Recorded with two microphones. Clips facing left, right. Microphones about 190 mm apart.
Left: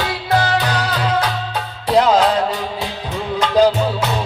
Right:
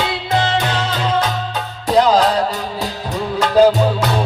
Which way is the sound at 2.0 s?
35° right (ahead or behind).